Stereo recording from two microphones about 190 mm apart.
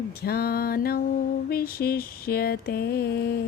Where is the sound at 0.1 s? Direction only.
55° left (ahead or behind).